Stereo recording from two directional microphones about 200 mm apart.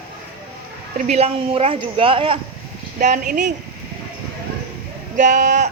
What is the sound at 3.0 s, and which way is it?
Speech, 40° right (ahead or behind).